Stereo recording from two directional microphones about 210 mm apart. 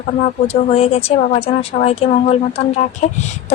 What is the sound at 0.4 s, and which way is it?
A woman's voice, 30° left (ahead or behind).